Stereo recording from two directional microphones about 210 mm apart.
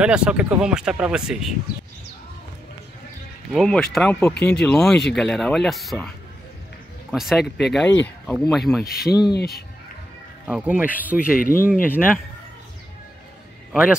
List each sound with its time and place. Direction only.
0.0 s speech: 5° right (ahead or behind)
3.5 s speech: 5° left (ahead or behind)
8.8 s speech: 45° left (ahead or behind)
10.4 s a man's voice: 5° right (ahead or behind)
11.3 s speech: 40° left (ahead or behind)
13.7 s a man's voice: centre (ahead or behind)